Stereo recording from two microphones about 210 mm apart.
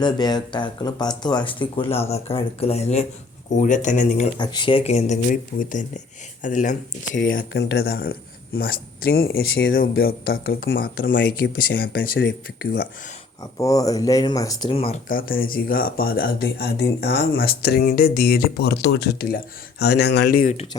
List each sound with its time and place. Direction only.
0.0 s speech: 20° left (ahead or behind); by 4.3 s 35° left (ahead or behind)
4.4 s speech: 20° left (ahead or behind)
7.3 s speech: 50° left (ahead or behind)
13.6 s speech: 15° left (ahead or behind)
15.1 s speech: 45° left (ahead or behind)